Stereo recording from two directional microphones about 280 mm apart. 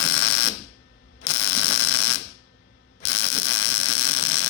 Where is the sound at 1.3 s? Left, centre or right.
Left.